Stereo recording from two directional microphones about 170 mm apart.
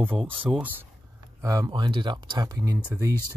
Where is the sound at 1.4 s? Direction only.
20° right (ahead or behind).